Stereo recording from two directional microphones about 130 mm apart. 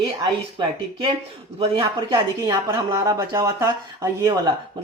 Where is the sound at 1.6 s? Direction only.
35° right (ahead or behind).